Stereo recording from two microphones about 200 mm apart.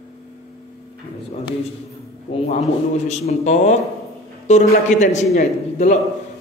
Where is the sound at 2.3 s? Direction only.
35° left (ahead or behind).